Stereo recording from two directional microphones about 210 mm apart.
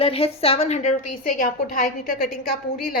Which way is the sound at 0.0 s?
25° left (ahead or behind).